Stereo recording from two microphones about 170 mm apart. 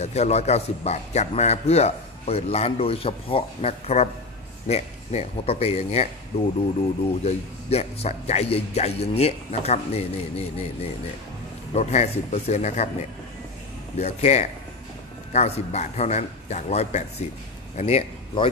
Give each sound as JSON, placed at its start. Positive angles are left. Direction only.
{"t": 0.0, "sound": "a man's voice", "side_deg": 40}
{"t": 7.2, "sound": "a man's voice", "side_deg": 40}
{"t": 13.9, "sound": "a man's voice", "side_deg": 40}